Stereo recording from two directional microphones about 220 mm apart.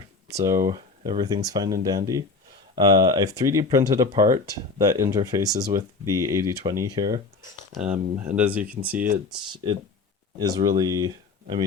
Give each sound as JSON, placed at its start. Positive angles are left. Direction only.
{"t": 0.4, "sound": "speech", "side_deg": -15}
{"t": 7.7, "sound": "speech", "side_deg": -5}
{"t": 9.0, "sound": "speech", "side_deg": -40}
{"t": 10.3, "sound": "speech", "side_deg": -15}